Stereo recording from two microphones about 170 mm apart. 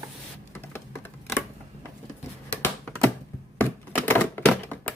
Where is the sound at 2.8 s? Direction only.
10° left (ahead or behind).